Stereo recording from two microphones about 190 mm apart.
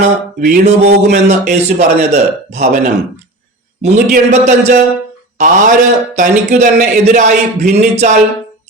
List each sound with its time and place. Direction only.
0.0 s speech: 45° right (ahead or behind)